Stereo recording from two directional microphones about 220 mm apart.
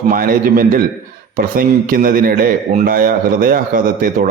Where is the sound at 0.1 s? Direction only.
40° right (ahead or behind).